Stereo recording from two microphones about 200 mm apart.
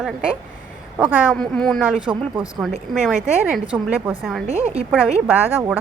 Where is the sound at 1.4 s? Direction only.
Centre (ahead or behind).